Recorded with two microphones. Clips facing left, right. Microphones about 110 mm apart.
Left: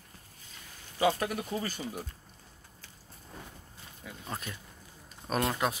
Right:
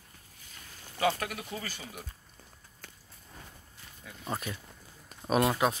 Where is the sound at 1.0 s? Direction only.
20° left (ahead or behind).